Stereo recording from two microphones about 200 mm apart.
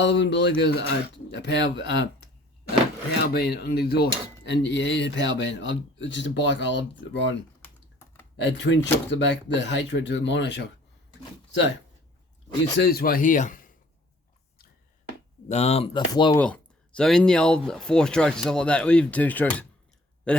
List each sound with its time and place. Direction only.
0.0 s cutlery: 60° left (ahead or behind)
3.3 s cutlery: 55° left (ahead or behind)
8.4 s cutlery: 60° left (ahead or behind)
12.7 s speech: 50° left (ahead or behind)
15.4 s speech: 30° left (ahead or behind)
16.4 s speech: 5° left (ahead or behind)